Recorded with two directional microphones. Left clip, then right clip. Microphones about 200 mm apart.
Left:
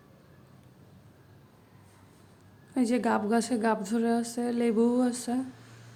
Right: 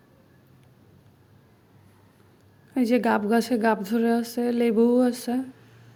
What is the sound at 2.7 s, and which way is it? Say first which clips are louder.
A woman's voice: right 5 dB; 15° right (ahead or behind).